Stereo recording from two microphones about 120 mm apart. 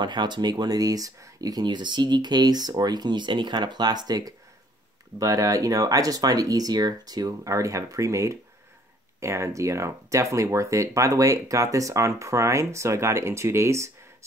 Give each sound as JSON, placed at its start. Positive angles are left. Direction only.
{"t": 0.0, "sound": "speech", "side_deg": -40}